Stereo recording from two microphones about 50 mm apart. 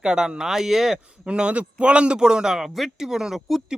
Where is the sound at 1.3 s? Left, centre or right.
Right.